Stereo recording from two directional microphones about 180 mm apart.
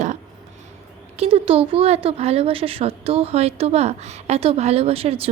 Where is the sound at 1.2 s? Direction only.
30° right (ahead or behind).